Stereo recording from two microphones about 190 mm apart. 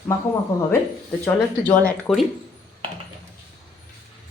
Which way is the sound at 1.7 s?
5° left (ahead or behind).